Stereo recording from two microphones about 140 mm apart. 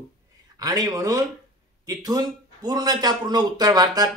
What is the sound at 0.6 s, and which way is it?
A man's voice, 30° right (ahead or behind).